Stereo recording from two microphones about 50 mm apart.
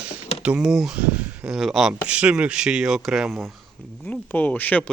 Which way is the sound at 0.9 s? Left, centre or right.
Right.